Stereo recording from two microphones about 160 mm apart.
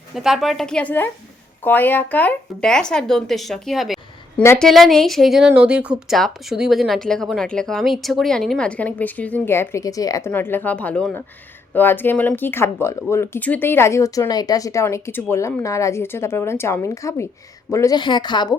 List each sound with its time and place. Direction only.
0.1 s a woman's voice: centre (ahead or behind); by 18.5 s 30° left (ahead or behind)